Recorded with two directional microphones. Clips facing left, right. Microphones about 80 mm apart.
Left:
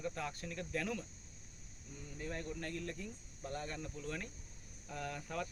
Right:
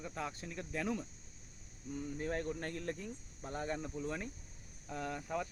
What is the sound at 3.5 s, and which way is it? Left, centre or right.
Speech, right.